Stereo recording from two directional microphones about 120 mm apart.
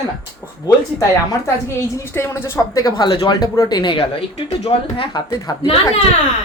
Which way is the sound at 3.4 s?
30° left (ahead or behind).